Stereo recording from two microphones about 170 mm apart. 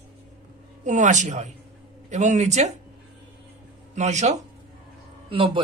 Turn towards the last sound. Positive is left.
turn(degrees=-30)  # may be behind; listen again after turning